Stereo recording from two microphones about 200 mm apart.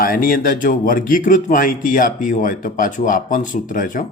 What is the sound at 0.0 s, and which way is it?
Speech, 45° left (ahead or behind).